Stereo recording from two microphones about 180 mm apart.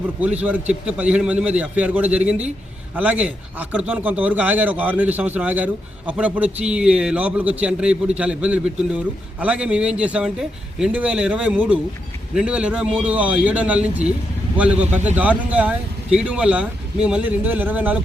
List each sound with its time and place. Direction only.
0.2 s a man's voice: 10° right (ahead or behind)